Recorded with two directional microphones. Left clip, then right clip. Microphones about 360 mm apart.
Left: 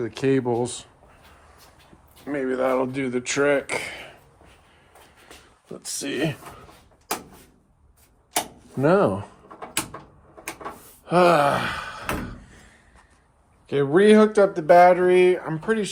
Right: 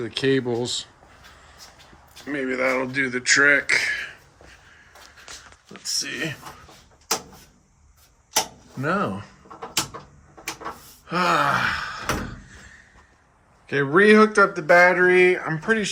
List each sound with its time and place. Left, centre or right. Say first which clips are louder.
0.0 s speech: even; centre
2.2 s speech: even; centre
5.8 s speech: even; centre
8.8 s speech: left 6 dB; centre
11.0 s gasp: left 3 dB; centre
13.7 s speech: right 1 dB; centre